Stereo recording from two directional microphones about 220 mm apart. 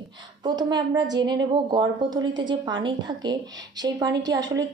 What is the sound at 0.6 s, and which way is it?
A woman's voice, 20° right (ahead or behind).